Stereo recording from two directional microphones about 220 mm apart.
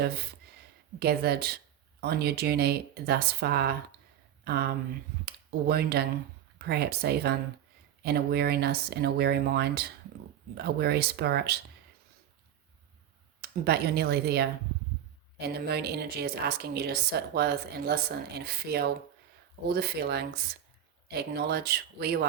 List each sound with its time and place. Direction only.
0.9 s speech: 45° right (ahead or behind)
13.7 s speech: 45° right (ahead or behind)